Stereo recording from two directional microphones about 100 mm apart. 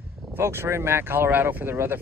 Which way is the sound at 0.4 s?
25° right (ahead or behind).